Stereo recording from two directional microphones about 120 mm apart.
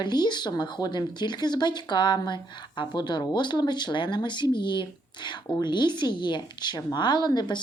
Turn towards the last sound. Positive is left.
turn(degrees=35)  # may be behind; listen again after turning